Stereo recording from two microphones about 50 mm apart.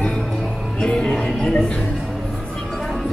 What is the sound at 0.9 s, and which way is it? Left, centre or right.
Music, centre.